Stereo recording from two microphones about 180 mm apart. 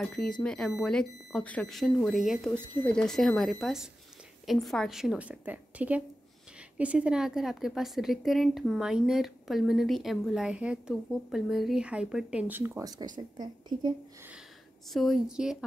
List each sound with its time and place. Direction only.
0.0 s a woman's voice: 5° left (ahead or behind); by 13.9 s 25° right (ahead or behind)
14.9 s a woman's voice: centre (ahead or behind)